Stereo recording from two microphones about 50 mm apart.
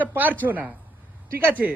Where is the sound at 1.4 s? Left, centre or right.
Right.